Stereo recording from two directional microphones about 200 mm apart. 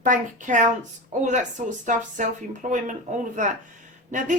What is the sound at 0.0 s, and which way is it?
A woman's voice, 40° right (ahead or behind).